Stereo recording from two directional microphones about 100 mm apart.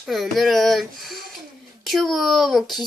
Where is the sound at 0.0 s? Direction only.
Centre (ahead or behind).